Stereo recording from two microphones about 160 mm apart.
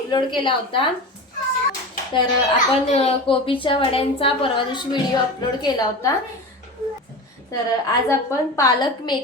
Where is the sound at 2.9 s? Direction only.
40° left (ahead or behind).